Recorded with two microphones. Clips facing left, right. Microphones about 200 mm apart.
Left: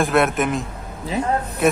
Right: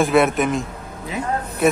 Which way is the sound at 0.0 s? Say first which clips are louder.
Right 2 dB; centre (ahead or behind).